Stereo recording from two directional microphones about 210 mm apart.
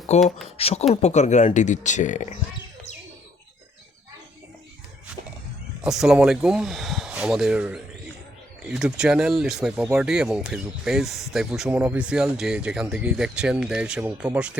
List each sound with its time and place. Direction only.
0.1 s speech: 30° left (ahead or behind)
5.8 s speech: centre (ahead or behind)